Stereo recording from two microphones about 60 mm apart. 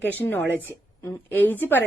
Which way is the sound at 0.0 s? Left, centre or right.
Left.